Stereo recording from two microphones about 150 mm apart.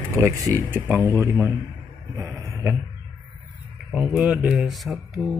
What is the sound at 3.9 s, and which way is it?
Speech, 10° right (ahead or behind).